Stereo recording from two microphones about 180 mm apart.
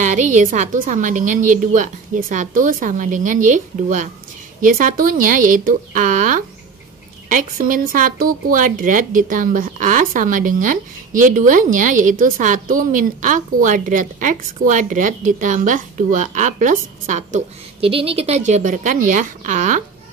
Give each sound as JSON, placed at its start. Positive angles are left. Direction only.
{"t": 0.0, "sound": "speech", "side_deg": -45}